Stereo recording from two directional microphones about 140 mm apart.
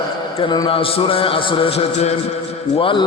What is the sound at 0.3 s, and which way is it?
Mantra, 30° left (ahead or behind).